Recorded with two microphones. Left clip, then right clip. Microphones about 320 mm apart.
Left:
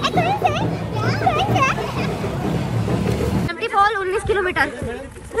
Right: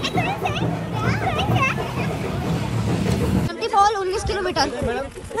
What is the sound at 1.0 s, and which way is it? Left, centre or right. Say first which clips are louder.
Children playing: left 5 dB; centre.